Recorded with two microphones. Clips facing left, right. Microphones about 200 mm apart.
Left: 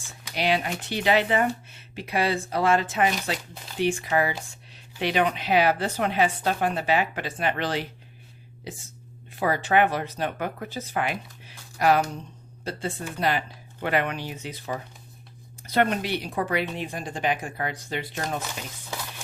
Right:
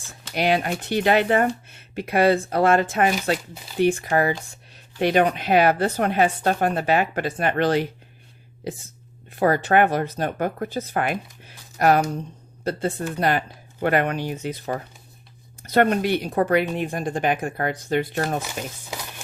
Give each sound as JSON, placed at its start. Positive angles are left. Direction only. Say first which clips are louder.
{"t": 0.3, "sound": "speech", "louder": "right 4 dB", "side_deg": -50}
{"t": 9.3, "sound": "speech", "louder": "right 4 dB", "side_deg": -50}